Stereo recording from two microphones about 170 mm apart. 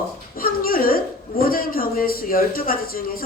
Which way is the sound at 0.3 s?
60° left (ahead or behind).